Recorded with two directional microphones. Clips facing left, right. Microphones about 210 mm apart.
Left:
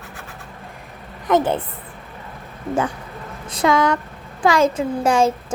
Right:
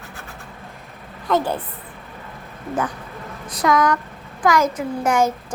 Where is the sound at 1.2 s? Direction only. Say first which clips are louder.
Left 3 dB; 20° left (ahead or behind).